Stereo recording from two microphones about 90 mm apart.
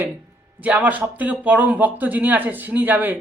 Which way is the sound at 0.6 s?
15° right (ahead or behind).